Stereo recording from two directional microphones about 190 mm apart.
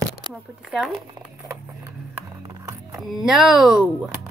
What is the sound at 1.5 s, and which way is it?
Music, 15° right (ahead or behind).